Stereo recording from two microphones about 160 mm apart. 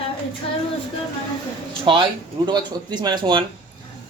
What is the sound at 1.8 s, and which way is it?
Speech, 30° right (ahead or behind).